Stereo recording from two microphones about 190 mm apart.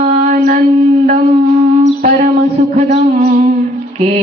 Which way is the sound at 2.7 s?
45° right (ahead or behind).